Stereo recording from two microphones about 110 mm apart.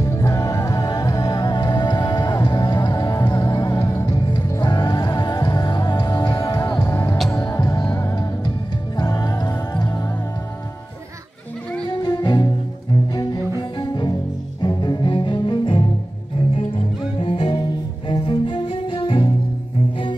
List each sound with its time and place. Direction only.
0.0 s music: 30° left (ahead or behind)
12.0 s music: 40° left (ahead or behind)
13.1 s cello: 45° left (ahead or behind)
17.2 s cello: 50° left (ahead or behind)